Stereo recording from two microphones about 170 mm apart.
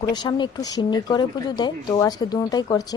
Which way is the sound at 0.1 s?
25° left (ahead or behind).